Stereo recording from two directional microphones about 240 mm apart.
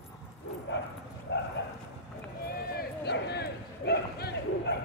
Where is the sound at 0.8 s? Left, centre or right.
Left.